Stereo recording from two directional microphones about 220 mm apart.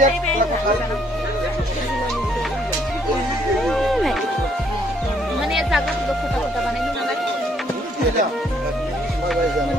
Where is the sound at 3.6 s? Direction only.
Centre (ahead or behind).